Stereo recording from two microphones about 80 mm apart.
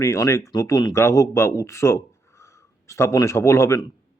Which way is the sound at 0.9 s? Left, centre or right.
Left.